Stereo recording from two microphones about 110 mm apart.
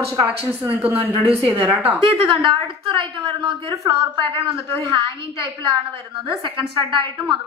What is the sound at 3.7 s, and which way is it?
Speech, 30° right (ahead or behind).